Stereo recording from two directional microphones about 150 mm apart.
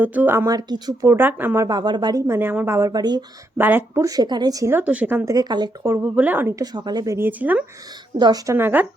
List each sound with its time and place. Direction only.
0.0 s speech: 10° right (ahead or behind)
1.1 s speech: 10° right (ahead or behind)
1.6 s speech: 30° right (ahead or behind)
3.6 s speech: 15° right (ahead or behind)
6.7 s speech: 30° right (ahead or behind); by 7.6 s 10° right (ahead or behind)
8.2 s speech: 25° right (ahead or behind)
8.5 s speech: 15° right (ahead or behind)